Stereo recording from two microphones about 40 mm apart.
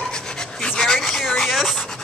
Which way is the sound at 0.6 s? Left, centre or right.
Centre.